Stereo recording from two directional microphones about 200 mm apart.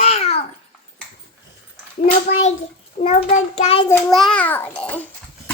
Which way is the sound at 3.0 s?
30° left (ahead or behind).